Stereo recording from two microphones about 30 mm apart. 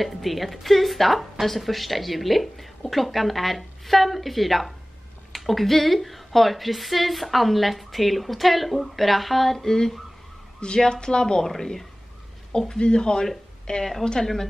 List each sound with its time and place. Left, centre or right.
0.0 s a woman's voice: centre
10.8 s speech: left
11.4 s a woman's voice: centre
12.5 s speech: left
14.2 s a woman's voice: centre